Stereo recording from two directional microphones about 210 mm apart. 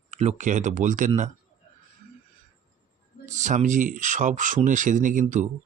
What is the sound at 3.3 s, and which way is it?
Speech, 35° right (ahead or behind).